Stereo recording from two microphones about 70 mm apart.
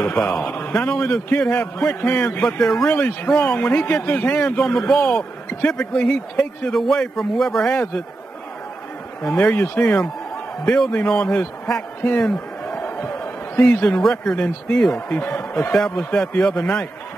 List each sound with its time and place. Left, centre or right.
0.0 s speech: left
4.5 s speech: centre
6.7 s speech: centre
9.4 s a man's voice: left
12.7 s a sound: left
13.8 s speech: centre
15.7 s speech: centre